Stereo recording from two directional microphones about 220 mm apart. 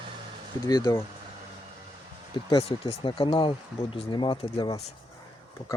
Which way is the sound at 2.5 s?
25° left (ahead or behind).